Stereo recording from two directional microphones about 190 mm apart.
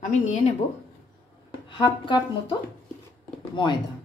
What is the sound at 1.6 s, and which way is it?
A woman's voice, 25° left (ahead or behind).